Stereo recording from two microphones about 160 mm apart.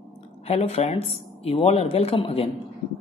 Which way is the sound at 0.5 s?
40° left (ahead or behind).